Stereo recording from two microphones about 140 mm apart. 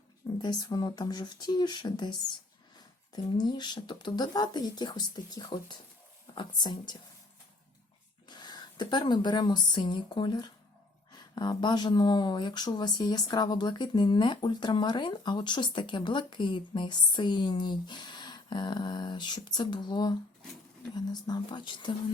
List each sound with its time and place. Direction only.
0.4 s speech: 30° left (ahead or behind)
8.3 s speech: 30° left (ahead or behind)